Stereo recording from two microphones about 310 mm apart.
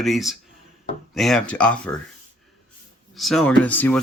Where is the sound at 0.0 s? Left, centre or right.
Centre.